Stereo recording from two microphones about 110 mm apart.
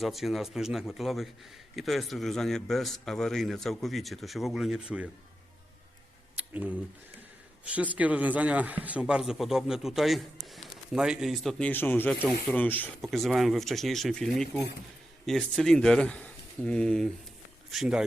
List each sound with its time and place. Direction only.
0.0 s speech: centre (ahead or behind)
6.3 s a sound: 10° right (ahead or behind)
7.6 s speech: 10° right (ahead or behind)
11.6 s speech: 15° left (ahead or behind)
13.0 s speech: centre (ahead or behind)
17.7 s speech: 5° right (ahead or behind)